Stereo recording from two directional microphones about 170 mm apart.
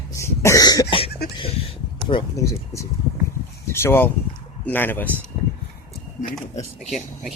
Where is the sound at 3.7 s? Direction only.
15° left (ahead or behind).